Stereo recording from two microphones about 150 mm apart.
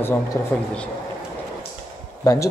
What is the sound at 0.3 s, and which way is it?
Speech, 20° left (ahead or behind).